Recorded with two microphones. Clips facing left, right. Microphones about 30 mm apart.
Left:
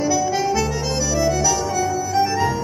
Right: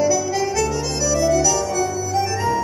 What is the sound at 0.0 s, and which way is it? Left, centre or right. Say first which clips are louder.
Music: even; centre.